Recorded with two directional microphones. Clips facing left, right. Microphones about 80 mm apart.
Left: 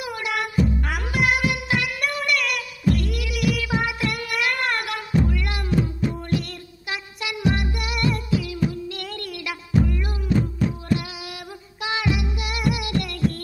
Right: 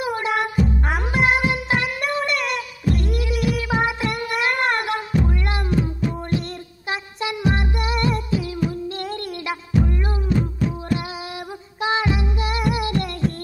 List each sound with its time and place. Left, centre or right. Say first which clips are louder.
0.0 s music: right 5 dB; right
3.1 s a sound: right 2 dB; right
4.8 s music: right 1 dB; right
6.9 s music: right 4 dB; right
11.8 s child singing: right 3 dB; right
12.7 s music: right 3 dB; right